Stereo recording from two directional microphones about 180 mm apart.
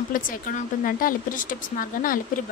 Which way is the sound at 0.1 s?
50° left (ahead or behind).